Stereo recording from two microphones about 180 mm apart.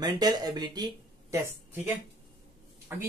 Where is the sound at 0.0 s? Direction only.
20° right (ahead or behind).